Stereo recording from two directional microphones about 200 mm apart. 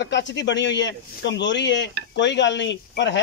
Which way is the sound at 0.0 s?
60° left (ahead or behind).